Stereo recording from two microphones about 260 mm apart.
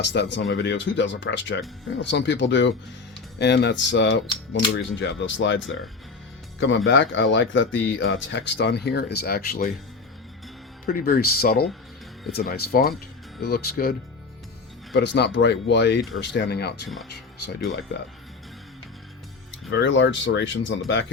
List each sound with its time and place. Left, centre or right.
0.0 s speech: left
10.8 s speech: left
14.9 s speech: left
19.7 s speech: left